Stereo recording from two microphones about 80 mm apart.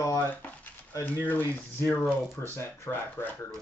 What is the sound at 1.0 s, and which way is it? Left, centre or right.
Speech, left.